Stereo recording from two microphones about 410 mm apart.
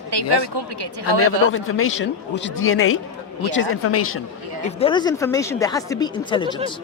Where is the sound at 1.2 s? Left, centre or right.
Left.